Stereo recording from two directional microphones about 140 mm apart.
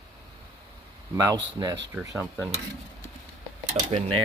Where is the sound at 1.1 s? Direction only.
25° right (ahead or behind).